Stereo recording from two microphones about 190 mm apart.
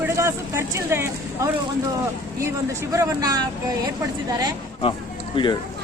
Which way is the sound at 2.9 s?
20° right (ahead or behind).